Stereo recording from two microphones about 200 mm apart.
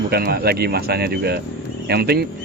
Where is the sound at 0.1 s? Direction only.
50° right (ahead or behind).